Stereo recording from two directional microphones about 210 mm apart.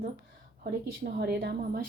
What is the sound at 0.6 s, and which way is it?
A woman's voice, 50° right (ahead or behind).